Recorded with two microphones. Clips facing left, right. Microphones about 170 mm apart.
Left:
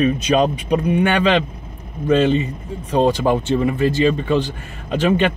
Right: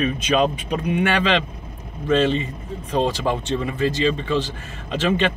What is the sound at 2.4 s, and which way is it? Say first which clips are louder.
Speech: left 3 dB; 40° left (ahead or behind).